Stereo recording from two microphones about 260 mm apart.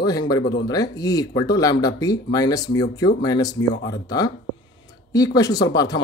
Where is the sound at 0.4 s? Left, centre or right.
Left.